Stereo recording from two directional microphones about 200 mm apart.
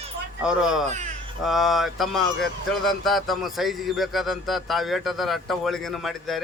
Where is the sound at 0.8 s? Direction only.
35° right (ahead or behind).